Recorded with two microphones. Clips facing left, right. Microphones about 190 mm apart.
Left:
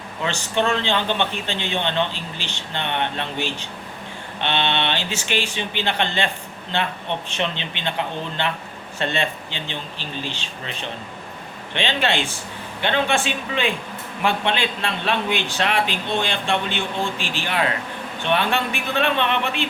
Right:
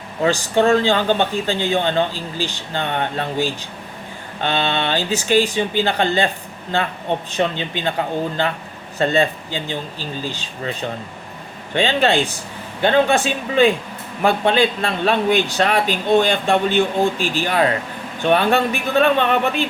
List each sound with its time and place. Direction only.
0.2 s speech: 40° right (ahead or behind)
4.4 s a man's voice: 40° right (ahead or behind)
9.0 s speech: 40° right (ahead or behind)
11.7 s speech: 40° right (ahead or behind)